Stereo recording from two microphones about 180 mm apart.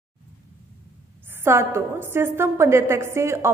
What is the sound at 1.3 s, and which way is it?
A woman's voice, 15° right (ahead or behind).